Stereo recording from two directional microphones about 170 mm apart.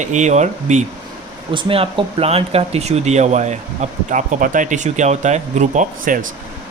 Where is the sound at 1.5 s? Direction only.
30° right (ahead or behind).